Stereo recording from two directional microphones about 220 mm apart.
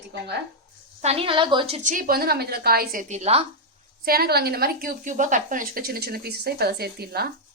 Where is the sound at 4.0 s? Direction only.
45° right (ahead or behind).